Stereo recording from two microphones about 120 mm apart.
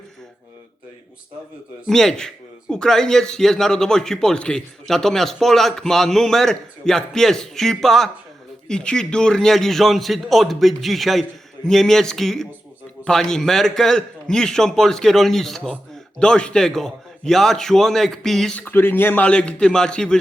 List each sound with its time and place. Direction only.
1.9 s a man's voice: 5° left (ahead or behind)
18.6 s a man's voice: 15° left (ahead or behind)